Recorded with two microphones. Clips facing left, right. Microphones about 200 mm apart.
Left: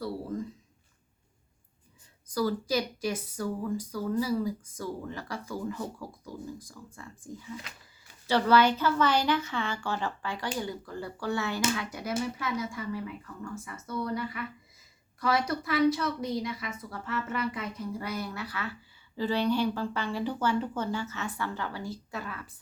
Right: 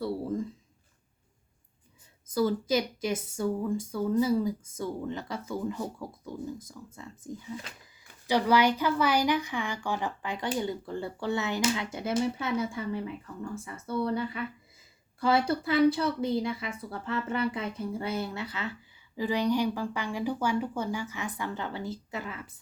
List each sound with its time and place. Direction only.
2.3 s a woman's voice: 20° right (ahead or behind)